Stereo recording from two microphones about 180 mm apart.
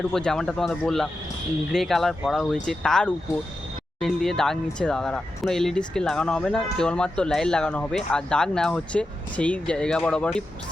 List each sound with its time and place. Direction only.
0.1 s speech: 5° left (ahead or behind)